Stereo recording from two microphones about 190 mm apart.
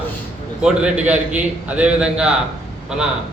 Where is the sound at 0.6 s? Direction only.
5° right (ahead or behind).